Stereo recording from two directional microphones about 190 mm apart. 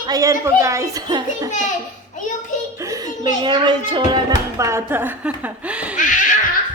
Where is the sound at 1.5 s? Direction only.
40° left (ahead or behind).